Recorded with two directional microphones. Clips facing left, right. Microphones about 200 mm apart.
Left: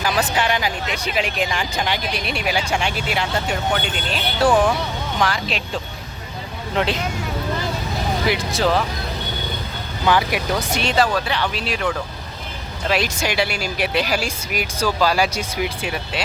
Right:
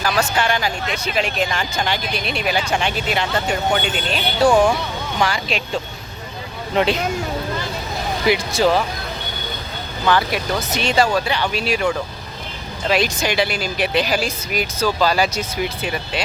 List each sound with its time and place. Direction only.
0.0 s speech: 15° left (ahead or behind); by 5.8 s centre (ahead or behind)
8.3 s speech: centre (ahead or behind)
10.1 s speech: 10° left (ahead or behind)
10.8 s speech: centre (ahead or behind)
12.9 s speech: 5° left (ahead or behind)